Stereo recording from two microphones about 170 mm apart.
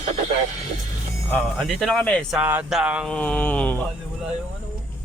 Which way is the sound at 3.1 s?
10° left (ahead or behind).